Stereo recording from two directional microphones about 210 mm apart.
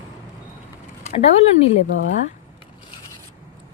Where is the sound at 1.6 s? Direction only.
30° left (ahead or behind).